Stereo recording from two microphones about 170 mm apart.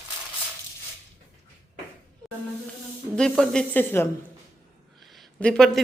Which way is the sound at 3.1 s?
5° left (ahead or behind).